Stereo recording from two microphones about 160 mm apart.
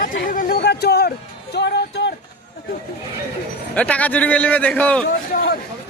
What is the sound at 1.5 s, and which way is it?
Music, 90° left.